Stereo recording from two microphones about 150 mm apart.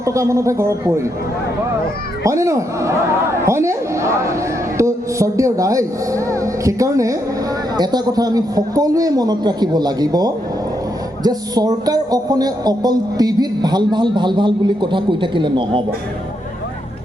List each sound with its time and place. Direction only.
0.0 s speech: 20° right (ahead or behind)
2.2 s speech: 20° right (ahead or behind)